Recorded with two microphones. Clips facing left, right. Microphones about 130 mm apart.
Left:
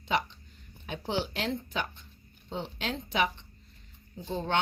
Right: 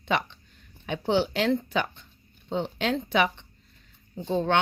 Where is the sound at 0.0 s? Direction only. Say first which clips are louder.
Right 3 dB; 65° right (ahead or behind).